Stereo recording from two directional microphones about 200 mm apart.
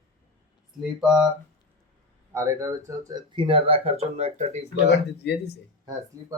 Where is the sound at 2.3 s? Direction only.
15° right (ahead or behind); by 4.6 s 35° right (ahead or behind).